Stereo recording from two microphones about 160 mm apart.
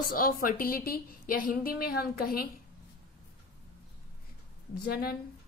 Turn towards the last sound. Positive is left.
turn(degrees=70)  # may be behind; listen again after turning